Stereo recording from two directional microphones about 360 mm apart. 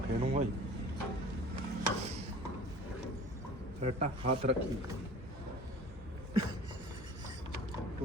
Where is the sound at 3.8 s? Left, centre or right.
Centre.